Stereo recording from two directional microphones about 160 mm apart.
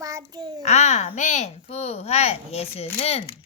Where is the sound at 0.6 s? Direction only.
45° left (ahead or behind).